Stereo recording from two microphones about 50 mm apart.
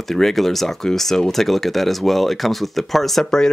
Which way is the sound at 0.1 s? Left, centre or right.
Centre.